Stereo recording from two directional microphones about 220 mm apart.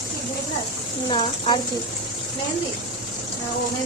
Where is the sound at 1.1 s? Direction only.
20° left (ahead or behind).